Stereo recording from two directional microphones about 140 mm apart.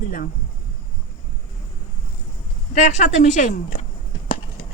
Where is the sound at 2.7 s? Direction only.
55° left (ahead or behind).